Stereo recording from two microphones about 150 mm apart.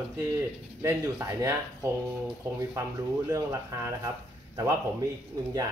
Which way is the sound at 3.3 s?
20° right (ahead or behind).